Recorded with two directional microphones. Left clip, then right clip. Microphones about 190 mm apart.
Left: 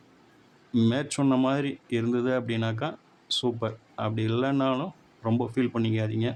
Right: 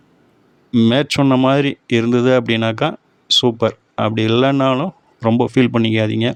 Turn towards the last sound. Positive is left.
turn(degrees=-45)  # may be behind; listen again after turning